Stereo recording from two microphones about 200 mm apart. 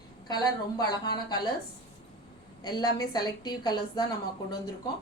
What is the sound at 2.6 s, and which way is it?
A woman's voice, 20° left (ahead or behind).